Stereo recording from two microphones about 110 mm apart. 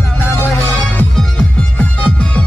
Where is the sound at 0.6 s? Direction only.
15° left (ahead or behind).